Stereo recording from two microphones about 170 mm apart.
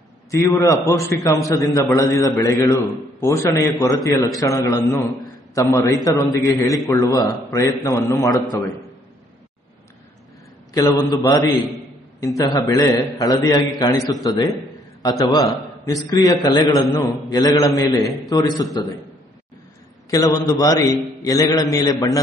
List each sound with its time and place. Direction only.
0.3 s a man's voice: 20° left (ahead or behind)
10.7 s a man's voice: 25° left (ahead or behind)
12.4 s a man's voice: 20° left (ahead or behind)
20.1 s a man's voice: 20° left (ahead or behind)